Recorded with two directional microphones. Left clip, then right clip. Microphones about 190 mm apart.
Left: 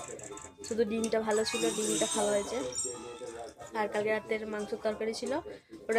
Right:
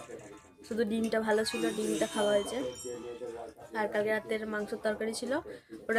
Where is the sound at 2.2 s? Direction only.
5° right (ahead or behind).